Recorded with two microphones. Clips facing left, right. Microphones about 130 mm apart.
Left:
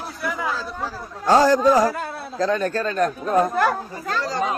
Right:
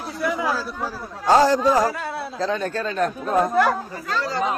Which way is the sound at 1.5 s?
45° left (ahead or behind).